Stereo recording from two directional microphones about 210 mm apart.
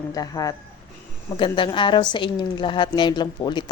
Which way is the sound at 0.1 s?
15° left (ahead or behind).